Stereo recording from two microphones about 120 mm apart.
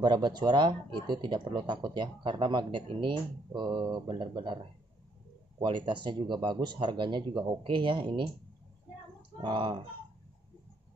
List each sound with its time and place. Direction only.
0.0 s speech: 40° right (ahead or behind)
5.6 s speech: 40° right (ahead or behind)
9.4 s speech: 40° right (ahead or behind)